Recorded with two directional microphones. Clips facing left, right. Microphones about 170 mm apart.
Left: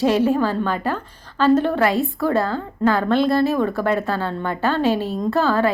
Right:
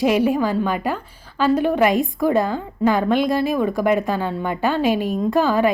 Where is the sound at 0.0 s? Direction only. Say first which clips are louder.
Even; 10° right (ahead or behind).